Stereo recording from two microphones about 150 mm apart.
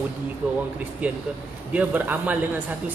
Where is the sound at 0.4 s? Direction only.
5° right (ahead or behind).